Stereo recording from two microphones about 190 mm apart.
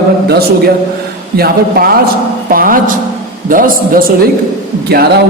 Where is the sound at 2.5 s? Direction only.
50° right (ahead or behind).